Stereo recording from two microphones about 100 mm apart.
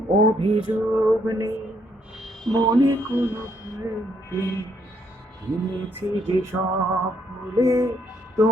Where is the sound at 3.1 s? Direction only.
25° left (ahead or behind).